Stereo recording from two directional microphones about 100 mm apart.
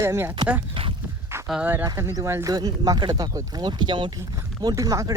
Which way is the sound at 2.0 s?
30° right (ahead or behind).